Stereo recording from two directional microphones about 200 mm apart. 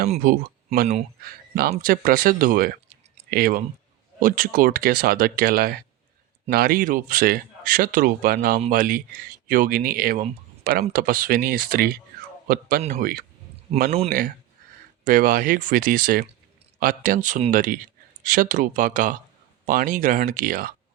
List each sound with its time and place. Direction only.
0.1 s speech: 40° right (ahead or behind)
1.2 s speech: 50° right (ahead or behind)
15.0 s speech: 45° right (ahead or behind)